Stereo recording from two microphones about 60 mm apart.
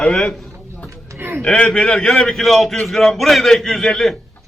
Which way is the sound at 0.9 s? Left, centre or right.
Right.